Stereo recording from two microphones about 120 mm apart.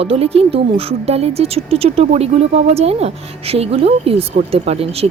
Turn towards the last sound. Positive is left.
turn(degrees=-55)  # may be behind; listen again after turning